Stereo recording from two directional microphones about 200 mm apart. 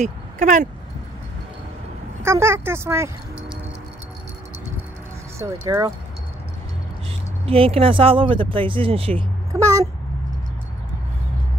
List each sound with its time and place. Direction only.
0.0 s speech: 40° right (ahead or behind)
2.2 s speech: 15° right (ahead or behind)
5.4 s speech: 15° right (ahead or behind)
7.4 s speech: 30° right (ahead or behind)
9.5 s a sound: 15° right (ahead or behind)